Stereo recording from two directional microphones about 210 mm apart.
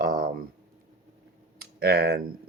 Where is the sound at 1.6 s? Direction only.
50° right (ahead or behind).